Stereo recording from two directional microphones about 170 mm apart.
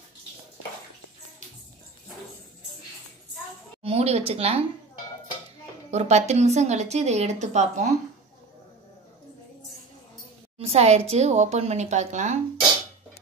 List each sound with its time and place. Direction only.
3.8 s a woman's voice: 35° right (ahead or behind)
5.9 s a woman's voice: 40° right (ahead or behind)
10.6 s a woman's voice: 40° right (ahead or behind)